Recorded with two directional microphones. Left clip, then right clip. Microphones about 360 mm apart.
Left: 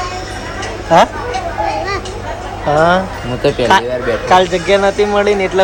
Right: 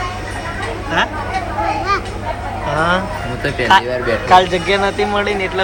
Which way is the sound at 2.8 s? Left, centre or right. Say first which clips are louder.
Left 5 dB; centre.